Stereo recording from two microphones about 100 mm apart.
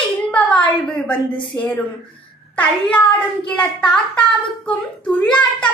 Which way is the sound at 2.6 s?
15° left (ahead or behind).